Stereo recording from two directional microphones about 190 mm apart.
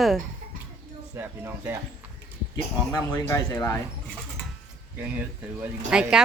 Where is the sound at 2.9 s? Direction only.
15° left (ahead or behind).